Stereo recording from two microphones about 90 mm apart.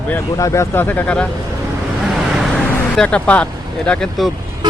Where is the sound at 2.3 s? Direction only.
Centre (ahead or behind).